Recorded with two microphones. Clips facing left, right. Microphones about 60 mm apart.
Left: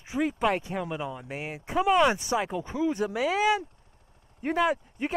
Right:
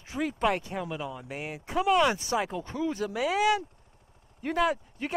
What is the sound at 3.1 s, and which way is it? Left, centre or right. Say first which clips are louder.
Speech: right 1 dB; centre.